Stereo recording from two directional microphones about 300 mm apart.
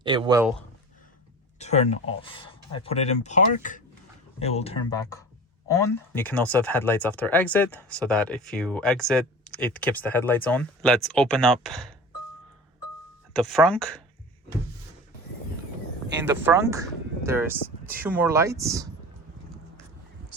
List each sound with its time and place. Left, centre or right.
0.0 s speech: centre
1.5 s speech: left; by 11.9 s centre
13.3 s speech: centre
16.2 s speech: centre